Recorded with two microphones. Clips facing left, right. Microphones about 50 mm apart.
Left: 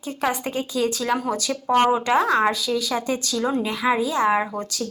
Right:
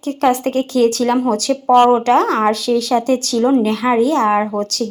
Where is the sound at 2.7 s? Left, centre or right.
Centre.